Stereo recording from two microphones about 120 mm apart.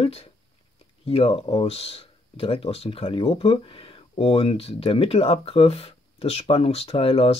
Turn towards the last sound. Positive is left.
turn(degrees=50)  # may be behind; listen again after turning